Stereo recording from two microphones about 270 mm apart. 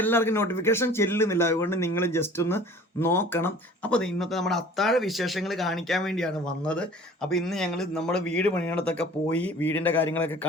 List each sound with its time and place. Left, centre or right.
0.0 s speech: centre